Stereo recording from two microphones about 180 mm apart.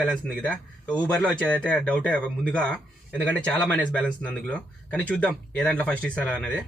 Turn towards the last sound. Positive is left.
turn(degrees=5)  # may be behind; listen again after turning